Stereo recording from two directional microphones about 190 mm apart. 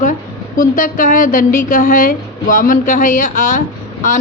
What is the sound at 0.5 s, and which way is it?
A woman's voice, 45° left (ahead or behind).